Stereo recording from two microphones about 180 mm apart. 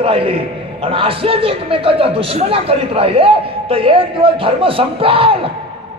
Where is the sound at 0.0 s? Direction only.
30° right (ahead or behind).